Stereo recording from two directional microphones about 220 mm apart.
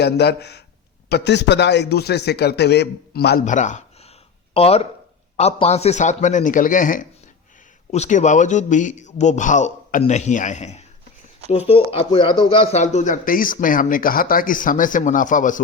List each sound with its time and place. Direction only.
0.0 s a man's voice: 50° left (ahead or behind)